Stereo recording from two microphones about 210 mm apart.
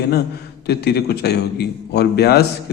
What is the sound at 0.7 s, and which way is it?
A man's voice, 50° left (ahead or behind).